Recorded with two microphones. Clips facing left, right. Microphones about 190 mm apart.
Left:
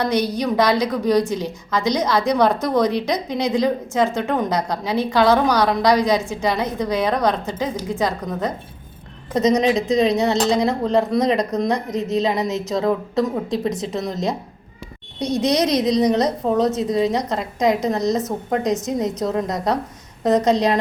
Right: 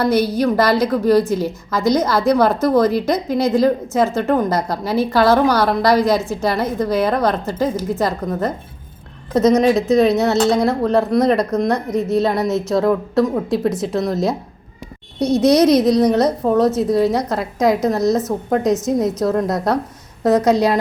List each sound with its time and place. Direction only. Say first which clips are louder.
0.0 s a woman's voice: right 4 dB; 5° right (ahead or behind)
11.9 s a woman's voice: right 3 dB; 20° left (ahead or behind)
12.5 s a woman's voice: right 4 dB; centre (ahead or behind)
15.4 s a woman's voice: right 6 dB; 5° right (ahead or behind)